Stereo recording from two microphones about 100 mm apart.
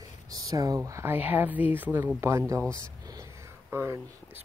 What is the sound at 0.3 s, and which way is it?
Speech, 40° right (ahead or behind).